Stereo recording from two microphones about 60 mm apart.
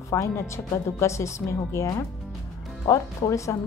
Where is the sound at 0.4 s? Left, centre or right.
Left.